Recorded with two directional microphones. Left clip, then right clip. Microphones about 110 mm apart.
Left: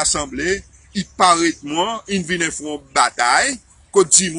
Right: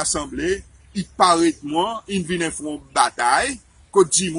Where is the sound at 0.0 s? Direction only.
25° right (ahead or behind).